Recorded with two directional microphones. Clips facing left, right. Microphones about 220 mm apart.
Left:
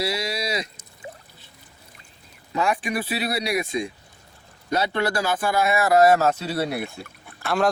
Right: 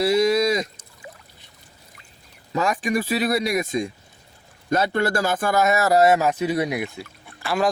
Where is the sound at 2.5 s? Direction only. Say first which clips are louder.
Right 2 dB; 40° right (ahead or behind).